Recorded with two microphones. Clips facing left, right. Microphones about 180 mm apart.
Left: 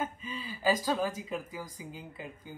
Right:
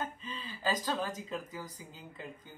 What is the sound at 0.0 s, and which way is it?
Speech, 10° left (ahead or behind).